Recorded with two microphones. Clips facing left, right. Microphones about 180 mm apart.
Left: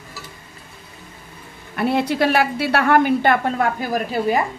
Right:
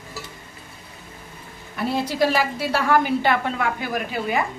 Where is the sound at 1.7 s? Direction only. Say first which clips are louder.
Left 3 dB; 60° left (ahead or behind); by 4.3 s 35° left (ahead or behind).